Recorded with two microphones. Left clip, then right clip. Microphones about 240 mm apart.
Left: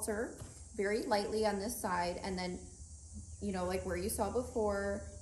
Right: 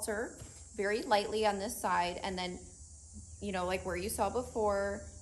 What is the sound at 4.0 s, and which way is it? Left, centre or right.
Speech, centre.